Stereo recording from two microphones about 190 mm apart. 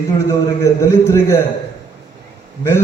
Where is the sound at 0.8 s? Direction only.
15° left (ahead or behind).